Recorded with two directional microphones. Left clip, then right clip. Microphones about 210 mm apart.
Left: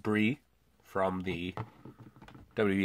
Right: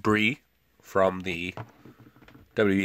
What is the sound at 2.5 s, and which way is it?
Speech, 30° right (ahead or behind).